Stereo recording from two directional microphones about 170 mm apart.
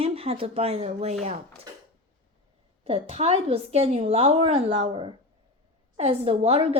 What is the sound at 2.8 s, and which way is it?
A child's voice, 35° right (ahead or behind).